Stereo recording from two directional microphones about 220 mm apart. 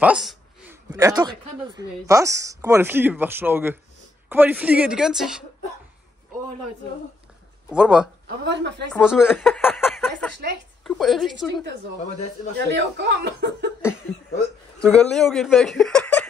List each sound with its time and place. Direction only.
0.0 s a sound: 5° right (ahead or behind)
0.9 s a woman's voice: 20° right (ahead or behind); by 5.4 s centre (ahead or behind)
7.7 s speech: 5° right (ahead or behind)
12.5 s speech: 50° right (ahead or behind)
14.8 s speech: 5° left (ahead or behind)